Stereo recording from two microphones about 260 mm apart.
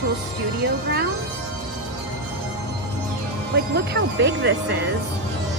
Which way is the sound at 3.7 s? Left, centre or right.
Right.